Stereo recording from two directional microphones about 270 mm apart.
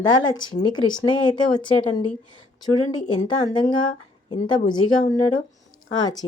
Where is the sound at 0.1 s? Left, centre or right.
Centre.